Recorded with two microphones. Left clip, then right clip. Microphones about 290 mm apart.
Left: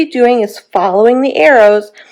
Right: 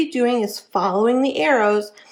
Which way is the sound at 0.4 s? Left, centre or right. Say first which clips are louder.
Left 9 dB; left.